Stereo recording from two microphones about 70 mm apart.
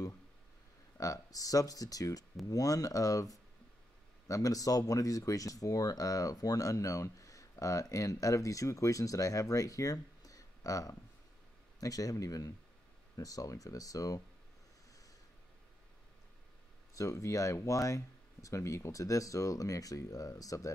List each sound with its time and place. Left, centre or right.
0.9 s speech: left
16.9 s speech: left